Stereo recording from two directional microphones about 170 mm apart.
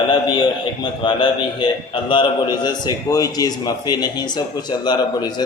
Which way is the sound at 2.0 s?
25° left (ahead or behind).